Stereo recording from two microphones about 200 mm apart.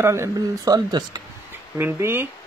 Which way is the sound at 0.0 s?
15° right (ahead or behind).